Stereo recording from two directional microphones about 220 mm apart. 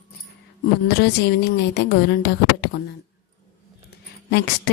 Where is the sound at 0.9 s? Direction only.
50° left (ahead or behind).